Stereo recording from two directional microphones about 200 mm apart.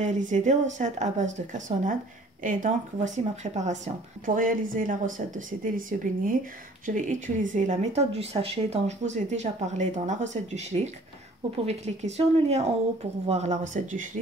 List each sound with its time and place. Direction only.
0.0 s speech: 40° right (ahead or behind)